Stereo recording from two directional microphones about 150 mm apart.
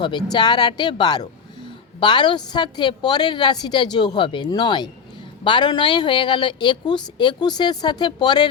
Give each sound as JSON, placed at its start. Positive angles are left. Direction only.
{"t": 0.0, "sound": "a woman's voice", "side_deg": 30}